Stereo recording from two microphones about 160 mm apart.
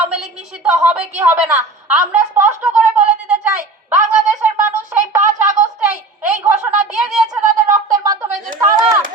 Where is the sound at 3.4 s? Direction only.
10° right (ahead or behind).